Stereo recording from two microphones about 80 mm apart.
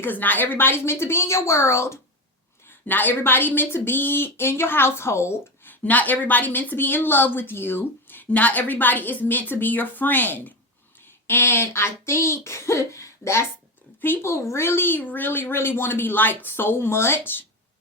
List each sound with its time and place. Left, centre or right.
0.0 s speech: left
2.8 s a woman's voice: left
5.8 s a woman's voice: centre